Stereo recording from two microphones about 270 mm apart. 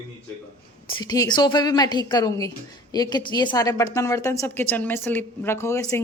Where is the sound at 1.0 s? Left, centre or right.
Centre.